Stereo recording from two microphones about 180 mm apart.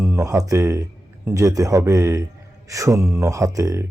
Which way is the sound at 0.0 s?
15° right (ahead or behind).